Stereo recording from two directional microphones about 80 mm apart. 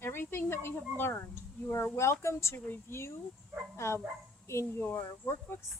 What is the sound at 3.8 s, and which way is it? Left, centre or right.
Speech, left.